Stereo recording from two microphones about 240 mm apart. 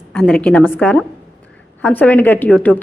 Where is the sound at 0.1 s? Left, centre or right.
Centre.